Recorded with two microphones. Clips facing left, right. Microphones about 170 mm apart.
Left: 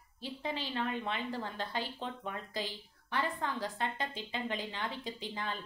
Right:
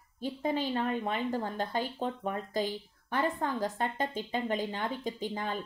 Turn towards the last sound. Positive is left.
turn(degrees=-45)  # may be behind; listen again after turning